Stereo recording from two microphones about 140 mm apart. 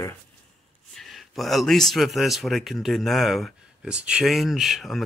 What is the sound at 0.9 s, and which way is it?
Speech, centre (ahead or behind).